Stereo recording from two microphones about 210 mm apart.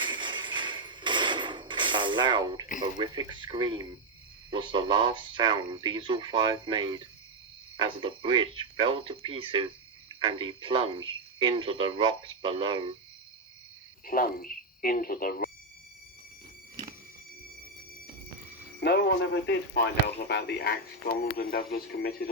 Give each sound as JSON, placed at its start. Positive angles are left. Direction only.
{"t": 0.0, "sound": "mechanisms", "side_deg": -20}
{"t": 2.8, "sound": "speech", "side_deg": -20}
{"t": 14.0, "sound": "speech", "side_deg": 40}
{"t": 18.8, "sound": "speech", "side_deg": 50}